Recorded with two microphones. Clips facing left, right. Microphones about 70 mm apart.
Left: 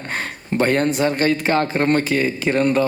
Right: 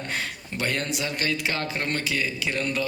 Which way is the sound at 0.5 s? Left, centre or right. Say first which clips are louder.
Left 11 dB; left.